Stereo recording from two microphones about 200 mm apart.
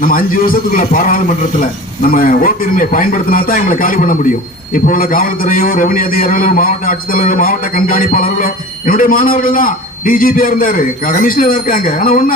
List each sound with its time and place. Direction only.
0.0 s a man's voice: 45° left (ahead or behind)